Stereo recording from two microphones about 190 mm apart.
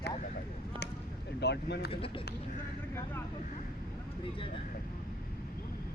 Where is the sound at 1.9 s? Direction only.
30° left (ahead or behind).